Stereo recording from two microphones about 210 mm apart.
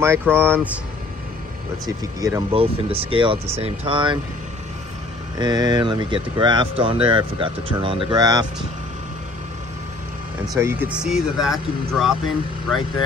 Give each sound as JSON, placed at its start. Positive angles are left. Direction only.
{"t": 0.0, "sound": "speech", "side_deg": -10}
{"t": 2.1, "sound": "speech", "side_deg": -15}
{"t": 5.4, "sound": "speech", "side_deg": -20}
{"t": 10.6, "sound": "speech", "side_deg": -10}